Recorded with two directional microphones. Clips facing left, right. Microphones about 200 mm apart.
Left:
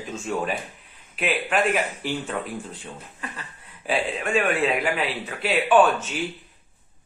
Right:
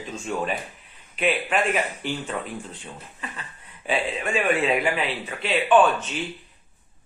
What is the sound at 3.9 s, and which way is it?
Speech, centre (ahead or behind).